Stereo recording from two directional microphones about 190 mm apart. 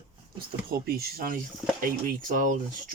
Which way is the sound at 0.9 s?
50° right (ahead or behind).